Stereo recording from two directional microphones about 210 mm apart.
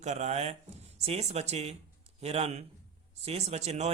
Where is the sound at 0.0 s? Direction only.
35° right (ahead or behind).